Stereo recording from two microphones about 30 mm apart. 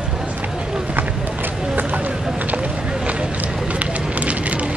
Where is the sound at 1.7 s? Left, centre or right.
Right.